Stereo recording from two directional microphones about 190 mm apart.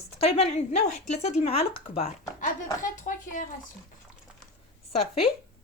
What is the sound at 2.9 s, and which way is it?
Speech, 40° left (ahead or behind).